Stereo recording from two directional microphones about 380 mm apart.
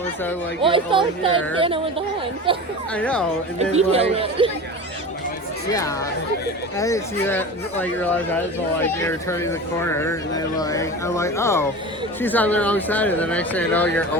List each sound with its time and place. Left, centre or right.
0.6 s speech: centre
2.9 s speech: centre
3.6 s speech: centre
6.7 s speech: centre